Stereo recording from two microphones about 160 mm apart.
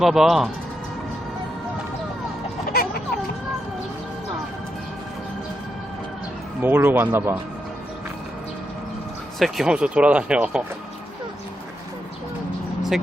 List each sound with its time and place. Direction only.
0.0 s speech: centre (ahead or behind)
2.6 s music: 70° left (ahead or behind)
6.6 s speech: 10° right (ahead or behind)
9.4 s speech: 5° right (ahead or behind)